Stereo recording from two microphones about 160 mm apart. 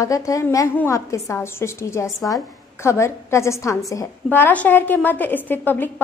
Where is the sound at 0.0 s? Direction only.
20° left (ahead or behind).